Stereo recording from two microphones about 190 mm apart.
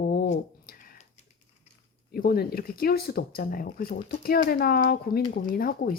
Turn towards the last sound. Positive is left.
turn(degrees=50)  # may be behind; listen again after turning